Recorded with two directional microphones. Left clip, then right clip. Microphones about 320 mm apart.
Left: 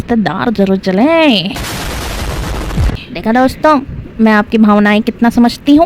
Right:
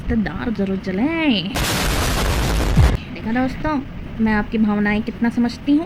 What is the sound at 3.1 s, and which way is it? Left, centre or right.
A woman's voice, left.